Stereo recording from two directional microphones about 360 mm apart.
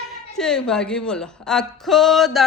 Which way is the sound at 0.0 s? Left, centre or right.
Centre.